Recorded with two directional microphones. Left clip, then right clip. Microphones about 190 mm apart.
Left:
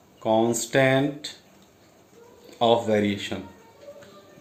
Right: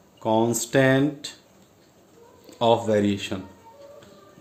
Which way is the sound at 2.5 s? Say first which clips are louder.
Even; 60° right (ahead or behind).